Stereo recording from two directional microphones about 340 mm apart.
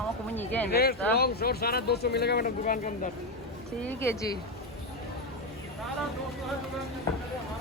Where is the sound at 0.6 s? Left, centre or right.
Left.